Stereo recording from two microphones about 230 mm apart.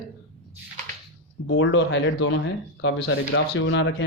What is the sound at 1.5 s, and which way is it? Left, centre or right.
Speech, left.